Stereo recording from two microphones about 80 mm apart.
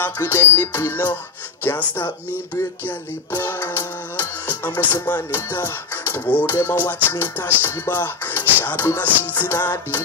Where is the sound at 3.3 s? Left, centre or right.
Left.